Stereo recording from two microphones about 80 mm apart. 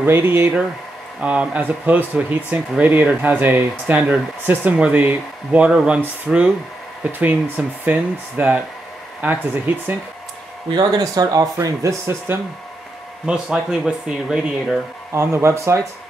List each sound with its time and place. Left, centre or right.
0.0 s speech: right
1.2 s speech: centre
11.0 s speech: right
11.5 s speech: right
13.2 s speech: centre
15.1 s speech: right